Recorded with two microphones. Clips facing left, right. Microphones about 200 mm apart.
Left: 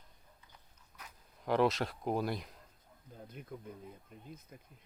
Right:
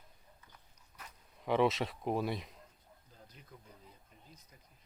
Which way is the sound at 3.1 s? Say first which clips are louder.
Left 10 dB; 55° left (ahead or behind).